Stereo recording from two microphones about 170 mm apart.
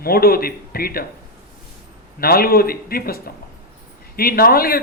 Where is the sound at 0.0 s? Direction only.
60° left (ahead or behind).